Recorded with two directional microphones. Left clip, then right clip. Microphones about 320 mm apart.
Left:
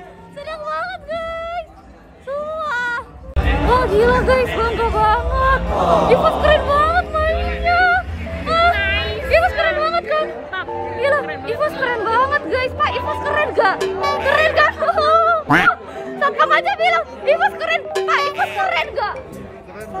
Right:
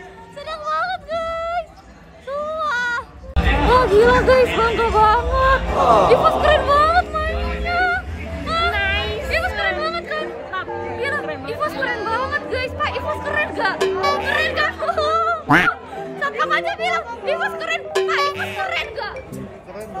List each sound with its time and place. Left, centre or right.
0.5 s a sound: centre
2.3 s baby cry: centre
3.7 s speech: centre
6.0 s music: centre
8.7 s a sound: centre
9.3 s music: centre
13.7 s music: centre
14.3 s a sound: centre
15.7 s chatter: centre
18.7 s music: centre